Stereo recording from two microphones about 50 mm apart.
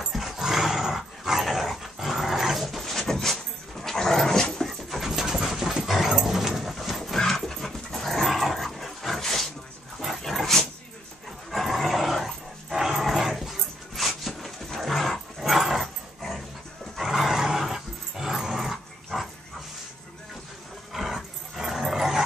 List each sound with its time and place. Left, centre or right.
0.0 s dog: centre
2.6 s a sound: centre
3.8 s dog: centre
20.9 s dog: centre